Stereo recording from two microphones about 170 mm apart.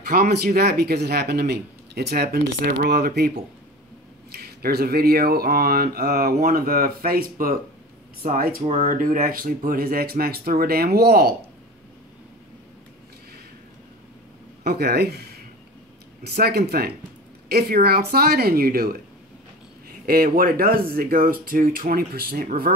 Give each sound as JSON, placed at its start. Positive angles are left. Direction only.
{"t": 0.1, "sound": "speech", "side_deg": -70}
{"t": 14.6, "sound": "speech", "side_deg": -70}
{"t": 20.1, "sound": "speech", "side_deg": -60}